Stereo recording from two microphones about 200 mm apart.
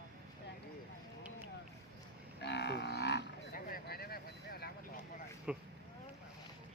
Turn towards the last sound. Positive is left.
turn(degrees=-5)  # may be behind; listen again after turning